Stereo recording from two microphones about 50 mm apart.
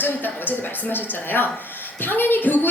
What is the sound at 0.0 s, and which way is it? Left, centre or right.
Speech, left.